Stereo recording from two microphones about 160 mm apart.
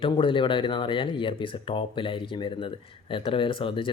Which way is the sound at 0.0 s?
30° left (ahead or behind).